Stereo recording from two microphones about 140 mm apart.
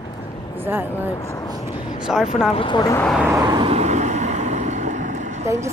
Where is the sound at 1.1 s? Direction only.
25° left (ahead or behind).